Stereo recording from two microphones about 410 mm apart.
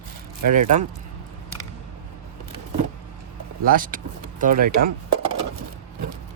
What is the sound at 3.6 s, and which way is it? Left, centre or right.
Speech, centre.